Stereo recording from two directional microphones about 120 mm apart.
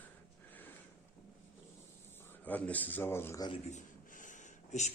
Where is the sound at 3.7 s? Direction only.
90° left.